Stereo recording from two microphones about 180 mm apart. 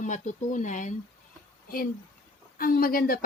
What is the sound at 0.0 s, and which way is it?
Speech, 45° left (ahead or behind).